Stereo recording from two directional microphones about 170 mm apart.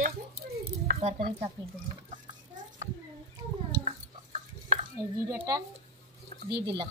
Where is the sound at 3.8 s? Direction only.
40° right (ahead or behind).